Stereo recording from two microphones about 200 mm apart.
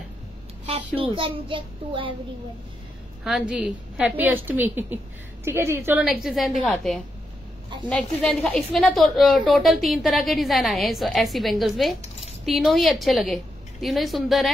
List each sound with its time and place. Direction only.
1.1 s a child's voice: 25° right (ahead or behind)
3.3 s a woman's voice: 5° right (ahead or behind)